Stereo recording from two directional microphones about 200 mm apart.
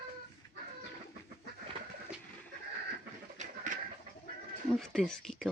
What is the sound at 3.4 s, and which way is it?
Bird, 35° right (ahead or behind).